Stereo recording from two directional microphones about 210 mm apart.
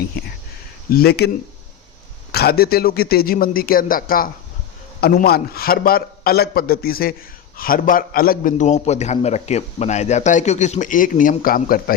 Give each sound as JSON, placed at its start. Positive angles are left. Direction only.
{"t": 0.1, "sound": "a man's voice", "side_deg": 45}
{"t": 2.3, "sound": "a man's voice", "side_deg": 50}